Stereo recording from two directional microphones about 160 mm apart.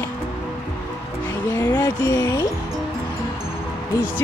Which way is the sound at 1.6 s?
15° left (ahead or behind).